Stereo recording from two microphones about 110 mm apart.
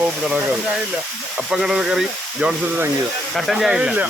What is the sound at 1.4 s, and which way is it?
Frying, 5° right (ahead or behind).